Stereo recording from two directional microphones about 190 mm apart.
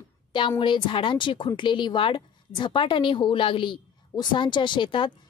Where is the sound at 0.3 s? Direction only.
25° left (ahead or behind).